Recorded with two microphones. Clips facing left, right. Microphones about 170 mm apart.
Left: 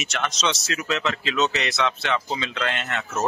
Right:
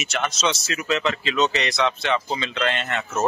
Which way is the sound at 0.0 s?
5° right (ahead or behind).